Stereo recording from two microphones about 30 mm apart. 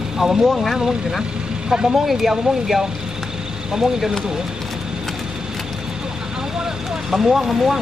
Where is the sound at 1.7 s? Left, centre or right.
Right.